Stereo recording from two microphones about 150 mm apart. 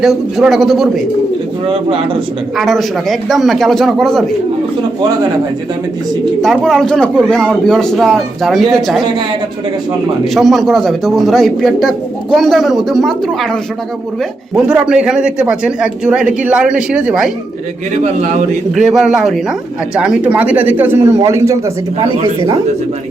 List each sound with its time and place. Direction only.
0.0 s a man's voice: centre (ahead or behind)
2.6 s a man's voice: centre (ahead or behind)
6.4 s a man's voice: centre (ahead or behind)
10.3 s a man's voice: centre (ahead or behind)
17.9 s a man's voice: 50° right (ahead or behind)
18.7 s a man's voice: centre (ahead or behind); by 21.6 s 20° right (ahead or behind)